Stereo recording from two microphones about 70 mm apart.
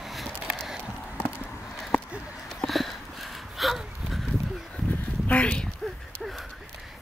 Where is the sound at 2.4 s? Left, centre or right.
Centre.